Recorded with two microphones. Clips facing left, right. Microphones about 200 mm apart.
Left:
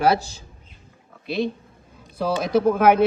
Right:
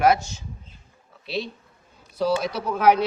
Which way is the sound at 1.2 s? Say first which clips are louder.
Left 5 dB; 50° left (ahead or behind).